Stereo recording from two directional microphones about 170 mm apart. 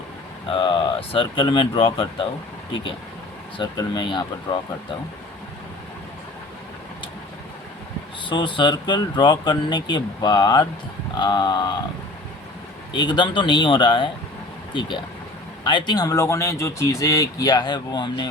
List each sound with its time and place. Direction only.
0.4 s speech: 30° left (ahead or behind)
3.6 s speech: 25° left (ahead or behind)
8.3 s speech: 30° left (ahead or behind)
12.9 s speech: 25° left (ahead or behind)
15.6 s speech: 25° left (ahead or behind)